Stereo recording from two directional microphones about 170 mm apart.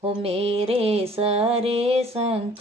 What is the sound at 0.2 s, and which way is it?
Mantra, 35° right (ahead or behind).